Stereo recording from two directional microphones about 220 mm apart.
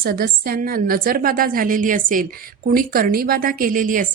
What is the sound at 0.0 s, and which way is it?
A woman's voice, 40° right (ahead or behind).